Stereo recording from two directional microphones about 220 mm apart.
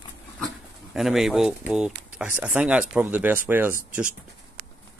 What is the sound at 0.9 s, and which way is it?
Speech, centre (ahead or behind).